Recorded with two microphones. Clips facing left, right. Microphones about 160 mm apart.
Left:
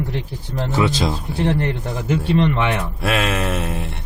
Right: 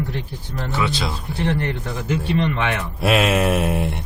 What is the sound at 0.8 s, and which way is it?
Speech, 40° left (ahead or behind).